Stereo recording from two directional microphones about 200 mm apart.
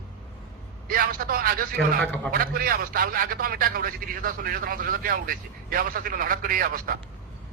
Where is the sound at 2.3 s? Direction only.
45° right (ahead or behind).